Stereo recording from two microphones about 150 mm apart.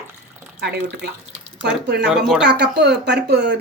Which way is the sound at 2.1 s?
5° right (ahead or behind).